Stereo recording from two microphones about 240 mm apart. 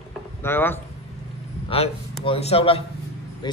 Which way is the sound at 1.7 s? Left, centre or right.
Left.